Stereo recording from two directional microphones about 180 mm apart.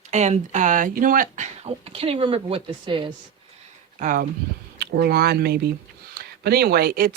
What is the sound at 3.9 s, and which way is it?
Speech, 45° right (ahead or behind).